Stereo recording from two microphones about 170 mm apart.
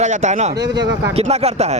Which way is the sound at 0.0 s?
45° right (ahead or behind).